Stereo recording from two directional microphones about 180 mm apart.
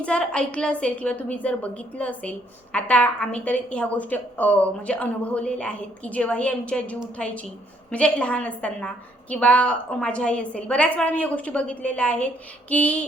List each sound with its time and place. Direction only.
0.0 s a woman's voice: 5° left (ahead or behind)